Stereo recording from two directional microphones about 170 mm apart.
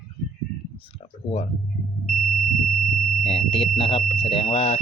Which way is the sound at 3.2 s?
35° left (ahead or behind).